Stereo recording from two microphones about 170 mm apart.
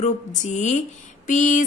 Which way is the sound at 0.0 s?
45° left (ahead or behind).